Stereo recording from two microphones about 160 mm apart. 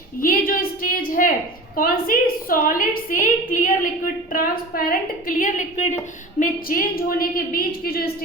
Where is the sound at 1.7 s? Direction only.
60° left (ahead or behind).